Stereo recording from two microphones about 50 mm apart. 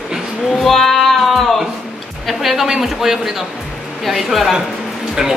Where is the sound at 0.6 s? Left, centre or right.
Centre.